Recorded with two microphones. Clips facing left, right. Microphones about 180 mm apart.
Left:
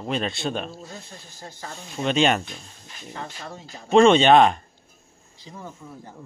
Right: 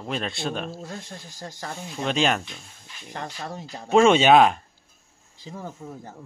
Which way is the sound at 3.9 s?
5° right (ahead or behind).